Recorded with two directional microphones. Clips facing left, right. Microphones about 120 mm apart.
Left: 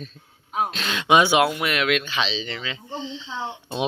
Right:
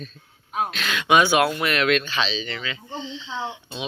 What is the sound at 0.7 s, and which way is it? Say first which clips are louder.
Speech: left 1 dB; 30° left (ahead or behind).